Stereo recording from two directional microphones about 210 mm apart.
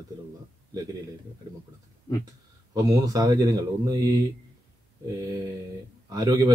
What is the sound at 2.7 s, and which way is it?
Speech, 15° right (ahead or behind).